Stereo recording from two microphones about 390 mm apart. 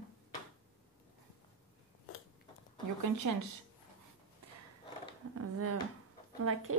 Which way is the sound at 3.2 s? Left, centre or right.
Right.